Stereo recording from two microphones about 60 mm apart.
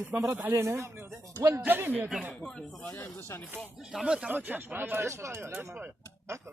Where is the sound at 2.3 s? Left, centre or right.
Centre.